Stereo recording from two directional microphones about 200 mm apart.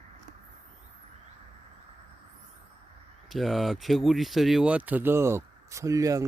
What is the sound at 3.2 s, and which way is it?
Speech, centre (ahead or behind).